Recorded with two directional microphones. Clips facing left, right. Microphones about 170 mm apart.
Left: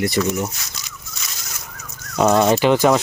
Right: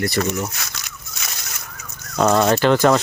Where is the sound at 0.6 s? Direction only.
60° right (ahead or behind).